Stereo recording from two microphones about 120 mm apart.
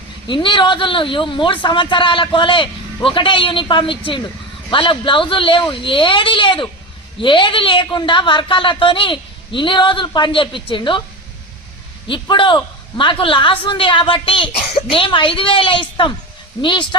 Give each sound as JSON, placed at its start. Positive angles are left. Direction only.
{"t": 0.3, "sound": "speech", "side_deg": 40}
{"t": 12.0, "sound": "speech", "side_deg": 45}